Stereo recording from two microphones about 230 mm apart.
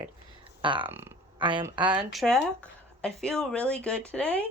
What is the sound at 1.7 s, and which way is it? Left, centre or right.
Speech, centre.